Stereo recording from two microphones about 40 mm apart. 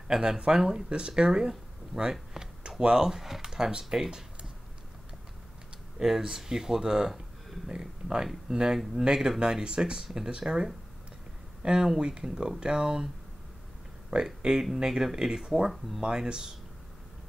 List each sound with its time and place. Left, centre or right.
0.1 s speech: centre
2.4 s a sound: centre
2.8 s speech: centre
5.9 s speech: centre
14.2 s speech: centre